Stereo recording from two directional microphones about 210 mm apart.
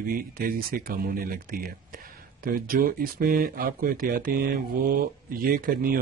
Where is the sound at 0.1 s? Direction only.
40° right (ahead or behind).